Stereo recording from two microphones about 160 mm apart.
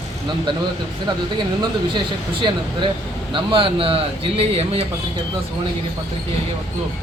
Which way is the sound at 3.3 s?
35° right (ahead or behind).